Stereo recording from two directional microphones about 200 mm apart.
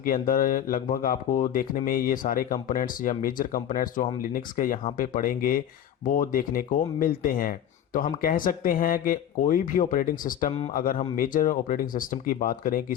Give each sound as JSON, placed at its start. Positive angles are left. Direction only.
{"t": 0.0, "sound": "speech", "side_deg": 45}